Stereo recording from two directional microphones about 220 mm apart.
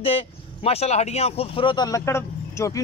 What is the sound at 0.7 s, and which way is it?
Speech, 30° left (ahead or behind).